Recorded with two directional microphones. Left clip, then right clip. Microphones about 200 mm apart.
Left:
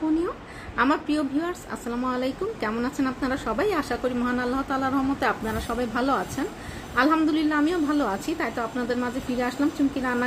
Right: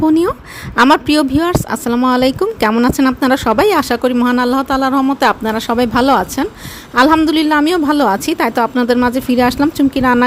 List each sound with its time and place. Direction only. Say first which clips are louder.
0.8 s speech: right 13 dB; 55° right (ahead or behind)